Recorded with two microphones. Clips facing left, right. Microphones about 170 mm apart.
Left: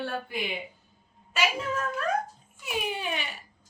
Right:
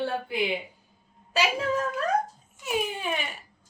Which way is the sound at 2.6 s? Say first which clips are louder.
Right 3 dB; 45° right (ahead or behind).